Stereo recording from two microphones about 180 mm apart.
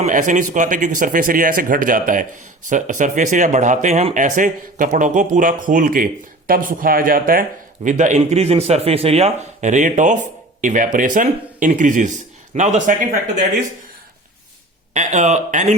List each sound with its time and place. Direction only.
0.0 s speech: 45° right (ahead or behind)
14.9 s speech: 40° right (ahead or behind)